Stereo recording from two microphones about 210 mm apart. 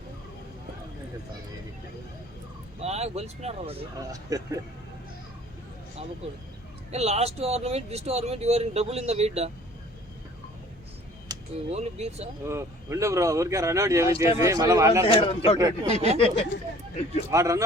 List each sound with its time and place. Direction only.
2.8 s speech: 30° right (ahead or behind)
4.1 s speech: 15° right (ahead or behind)
6.9 s speech: 30° right (ahead or behind)
11.3 s a sound: 20° right (ahead or behind)
11.7 s speech: 30° right (ahead or behind)
12.5 s speech: 15° right (ahead or behind)
15.0 s speech: 25° left (ahead or behind)
15.5 s speech: 15° right (ahead or behind)
15.9 s speech: 30° right (ahead or behind)
16.1 s speech: 25° left (ahead or behind)
17.3 s speech: 15° right (ahead or behind)